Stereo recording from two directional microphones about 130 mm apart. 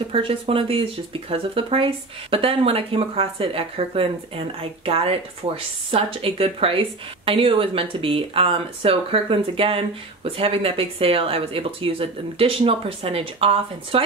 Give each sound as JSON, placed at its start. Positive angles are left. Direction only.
{"t": 0.1, "sound": "speech", "side_deg": -45}